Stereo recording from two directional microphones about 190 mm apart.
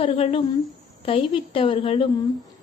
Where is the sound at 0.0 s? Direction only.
30° left (ahead or behind).